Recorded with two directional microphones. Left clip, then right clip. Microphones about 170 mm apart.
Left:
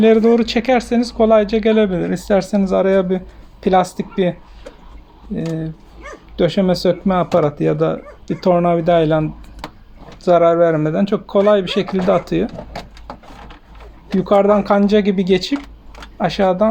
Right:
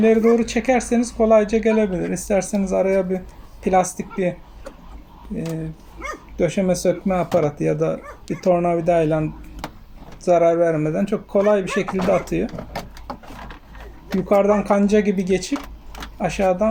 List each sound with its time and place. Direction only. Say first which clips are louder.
0.0 s speech: left 4 dB; 30° left (ahead or behind)
14.3 s speech: left 4 dB; 30° left (ahead or behind)